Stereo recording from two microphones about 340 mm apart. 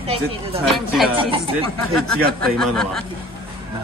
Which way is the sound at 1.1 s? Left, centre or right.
Centre.